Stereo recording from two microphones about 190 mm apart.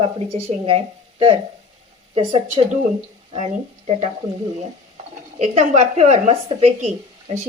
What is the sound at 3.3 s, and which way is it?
Speech, 35° right (ahead or behind).